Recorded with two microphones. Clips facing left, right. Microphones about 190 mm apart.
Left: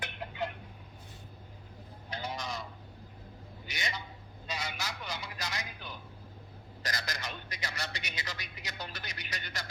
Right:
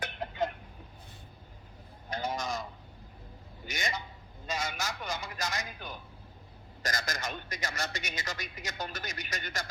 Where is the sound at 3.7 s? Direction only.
45° right (ahead or behind).